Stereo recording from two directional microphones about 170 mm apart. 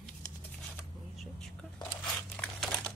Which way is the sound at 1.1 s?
Centre (ahead or behind).